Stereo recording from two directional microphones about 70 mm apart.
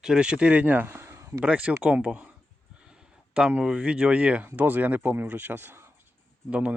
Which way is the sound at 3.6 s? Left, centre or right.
Centre.